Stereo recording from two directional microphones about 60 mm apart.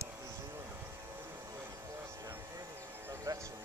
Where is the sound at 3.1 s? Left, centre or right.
Right.